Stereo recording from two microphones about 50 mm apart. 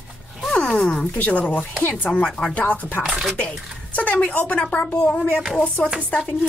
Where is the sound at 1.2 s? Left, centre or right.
Left.